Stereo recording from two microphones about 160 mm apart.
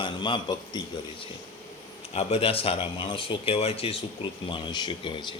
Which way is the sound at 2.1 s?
40° left (ahead or behind).